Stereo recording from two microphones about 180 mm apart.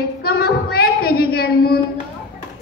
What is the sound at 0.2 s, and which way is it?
A woman's voice, 60° left (ahead or behind).